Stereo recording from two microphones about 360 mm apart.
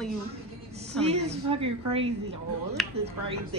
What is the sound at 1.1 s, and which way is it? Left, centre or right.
A man's voice, centre.